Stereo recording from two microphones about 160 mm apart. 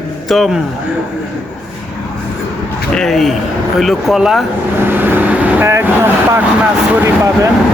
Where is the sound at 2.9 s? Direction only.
5° left (ahead or behind).